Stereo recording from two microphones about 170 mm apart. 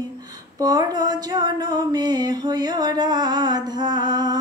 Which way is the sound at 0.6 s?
25° right (ahead or behind).